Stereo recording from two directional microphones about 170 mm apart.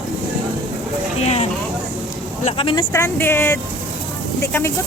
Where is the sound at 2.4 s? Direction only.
30° left (ahead or behind).